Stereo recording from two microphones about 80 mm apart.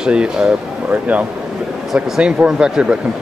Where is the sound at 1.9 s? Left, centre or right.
Centre.